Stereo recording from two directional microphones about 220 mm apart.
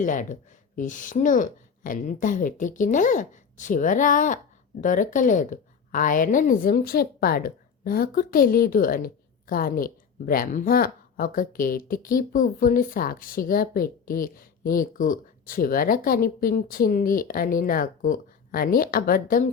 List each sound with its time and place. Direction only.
0.0 s speech: 35° left (ahead or behind)